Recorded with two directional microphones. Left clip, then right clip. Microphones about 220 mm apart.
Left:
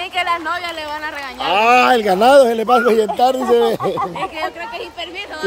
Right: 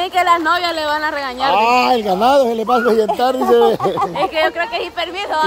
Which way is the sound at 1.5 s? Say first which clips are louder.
Left 2 dB; 10° left (ahead or behind).